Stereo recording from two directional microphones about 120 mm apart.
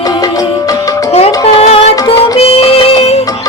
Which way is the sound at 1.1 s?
60° left (ahead or behind).